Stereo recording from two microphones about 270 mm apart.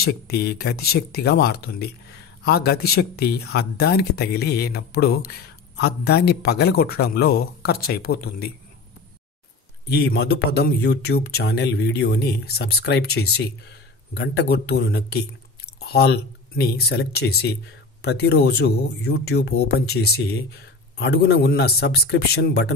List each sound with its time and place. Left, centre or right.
0.0 s speech: left
9.8 s speech: left